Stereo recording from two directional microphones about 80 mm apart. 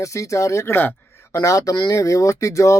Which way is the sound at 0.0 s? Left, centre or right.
Left.